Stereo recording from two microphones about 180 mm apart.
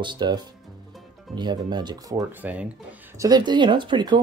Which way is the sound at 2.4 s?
10° right (ahead or behind).